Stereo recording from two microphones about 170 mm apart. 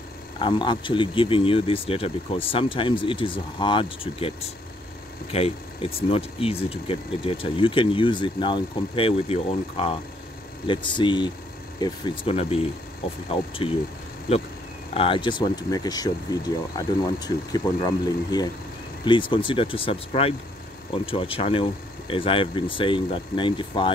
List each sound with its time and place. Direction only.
0.4 s speech: 30° left (ahead or behind)
15.0 s speech: 30° left (ahead or behind)